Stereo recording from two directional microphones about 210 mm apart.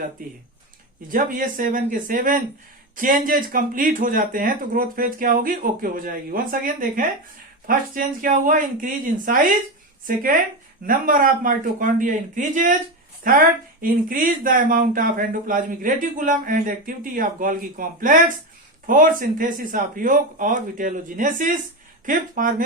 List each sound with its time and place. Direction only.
1.1 s speech: 40° right (ahead or behind)
10.8 s speech: 40° right (ahead or behind)